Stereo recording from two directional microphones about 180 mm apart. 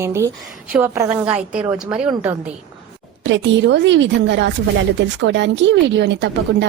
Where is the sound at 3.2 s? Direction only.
85° right.